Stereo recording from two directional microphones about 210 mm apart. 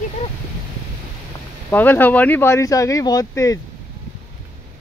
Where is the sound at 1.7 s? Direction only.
10° left (ahead or behind).